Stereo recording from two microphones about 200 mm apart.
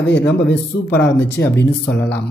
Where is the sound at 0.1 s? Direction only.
60° left (ahead or behind).